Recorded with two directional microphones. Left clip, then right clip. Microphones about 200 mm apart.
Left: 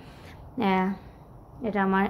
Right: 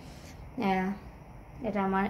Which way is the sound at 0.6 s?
35° left (ahead or behind).